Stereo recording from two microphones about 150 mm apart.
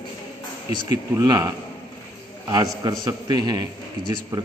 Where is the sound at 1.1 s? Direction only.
25° right (ahead or behind).